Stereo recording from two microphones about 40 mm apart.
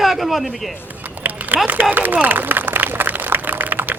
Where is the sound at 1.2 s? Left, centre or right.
Right.